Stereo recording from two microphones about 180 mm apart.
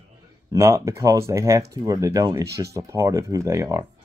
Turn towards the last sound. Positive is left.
turn(degrees=-15)  # may be behind; listen again after turning